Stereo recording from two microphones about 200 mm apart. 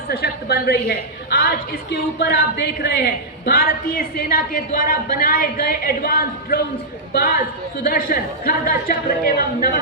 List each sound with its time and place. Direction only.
0.1 s a woman's voice: 55° left (ahead or behind)